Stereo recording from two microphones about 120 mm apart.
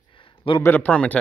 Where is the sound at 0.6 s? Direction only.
15° left (ahead or behind).